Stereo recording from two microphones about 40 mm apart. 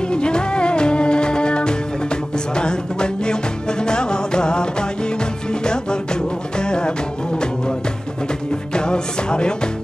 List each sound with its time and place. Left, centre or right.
0.1 s music: left
8.7 s music: left